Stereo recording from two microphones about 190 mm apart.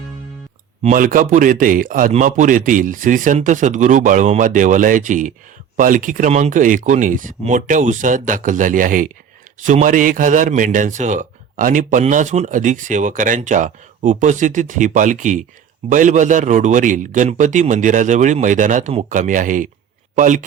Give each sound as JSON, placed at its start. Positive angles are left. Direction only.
{"t": 0.8, "sound": "a man's voice", "side_deg": -45}